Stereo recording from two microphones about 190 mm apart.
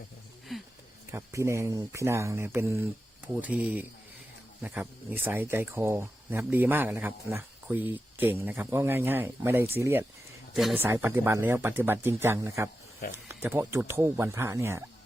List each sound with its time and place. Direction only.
0.5 s a sound: centre (ahead or behind)
1.1 s speech: 15° right (ahead or behind)
10.5 s speech: centre (ahead or behind)
10.8 s speech: 15° right (ahead or behind)